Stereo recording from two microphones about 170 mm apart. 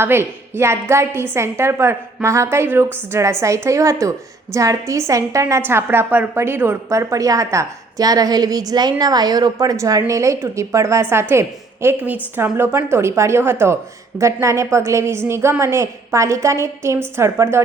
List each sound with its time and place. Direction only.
0.0 s a woman's voice: 15° right (ahead or behind)